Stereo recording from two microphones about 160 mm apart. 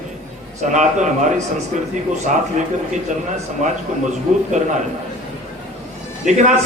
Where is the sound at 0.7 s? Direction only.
50° right (ahead or behind).